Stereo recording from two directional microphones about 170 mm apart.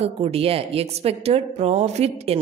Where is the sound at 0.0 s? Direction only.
35° right (ahead or behind).